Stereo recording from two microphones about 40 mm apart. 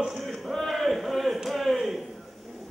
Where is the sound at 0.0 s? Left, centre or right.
Centre.